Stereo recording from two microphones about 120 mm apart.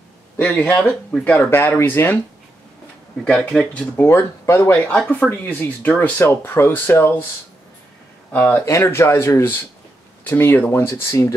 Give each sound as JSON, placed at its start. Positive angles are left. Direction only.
{"t": 0.4, "sound": "speech", "side_deg": 10}
{"t": 3.3, "sound": "speech", "side_deg": 5}
{"t": 3.9, "sound": "speech", "side_deg": 20}
{"t": 4.9, "sound": "speech", "side_deg": 10}
{"t": 8.3, "sound": "speech", "side_deg": 15}